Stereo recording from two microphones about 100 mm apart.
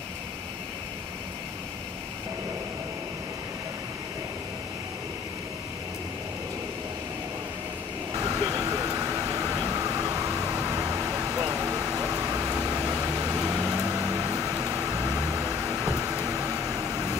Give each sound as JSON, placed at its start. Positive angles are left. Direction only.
{"t": 8.1, "sound": "vehicle", "side_deg": -35}